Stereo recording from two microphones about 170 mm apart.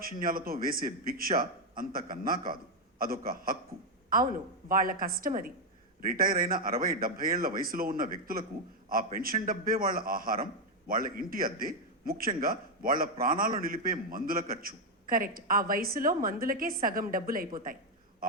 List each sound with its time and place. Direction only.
0.0 s a man's voice: 60° right (ahead or behind)
4.7 s a man's voice: 55° right (ahead or behind)